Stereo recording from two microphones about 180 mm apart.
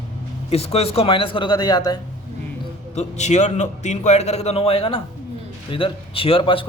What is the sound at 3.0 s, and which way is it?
A man's voice, 40° left (ahead or behind).